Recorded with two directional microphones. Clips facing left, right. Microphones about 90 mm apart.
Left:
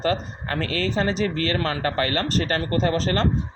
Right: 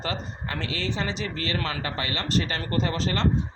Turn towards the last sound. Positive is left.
turn(degrees=40)  # may be behind; listen again after turning